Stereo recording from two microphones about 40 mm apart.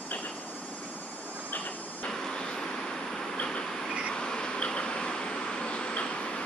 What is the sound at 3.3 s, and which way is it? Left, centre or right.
Vehicle, left.